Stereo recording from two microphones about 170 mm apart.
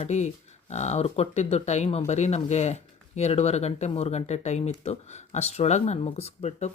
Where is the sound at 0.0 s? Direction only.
40° left (ahead or behind).